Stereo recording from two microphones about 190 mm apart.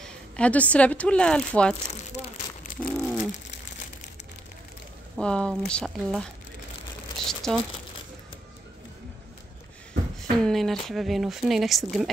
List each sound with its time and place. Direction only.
0.0 s speech: 5° left (ahead or behind)
2.1 s a sound: 40° left (ahead or behind)
2.9 s a sound: centre (ahead or behind)
5.2 s speech: 5° left (ahead or behind)
7.2 s speech: centre (ahead or behind)
10.4 s speech: centre (ahead or behind)